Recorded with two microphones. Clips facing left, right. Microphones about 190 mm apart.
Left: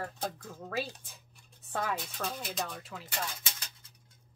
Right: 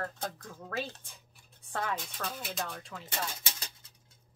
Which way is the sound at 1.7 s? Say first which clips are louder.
Left 1 dB; 5° left (ahead or behind).